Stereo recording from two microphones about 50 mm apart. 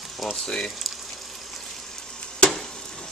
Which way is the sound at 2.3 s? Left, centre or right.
Centre.